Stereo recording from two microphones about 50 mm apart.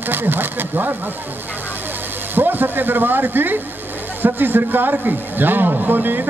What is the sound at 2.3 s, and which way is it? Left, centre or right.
A man's voice, right.